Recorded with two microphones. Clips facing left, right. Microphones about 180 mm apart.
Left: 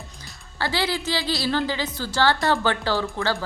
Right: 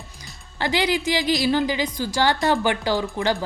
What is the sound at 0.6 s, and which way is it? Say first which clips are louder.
A woman's voice: right 3 dB; 15° right (ahead or behind).